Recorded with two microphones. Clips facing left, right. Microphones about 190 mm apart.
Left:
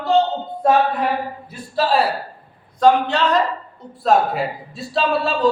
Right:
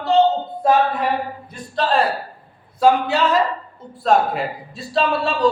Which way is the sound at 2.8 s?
10° right (ahead or behind).